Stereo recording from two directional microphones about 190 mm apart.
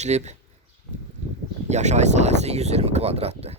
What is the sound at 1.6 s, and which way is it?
Speech, 35° right (ahead or behind).